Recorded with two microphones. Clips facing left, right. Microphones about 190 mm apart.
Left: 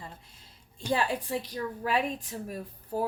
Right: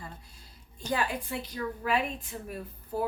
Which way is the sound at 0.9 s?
35° left (ahead or behind).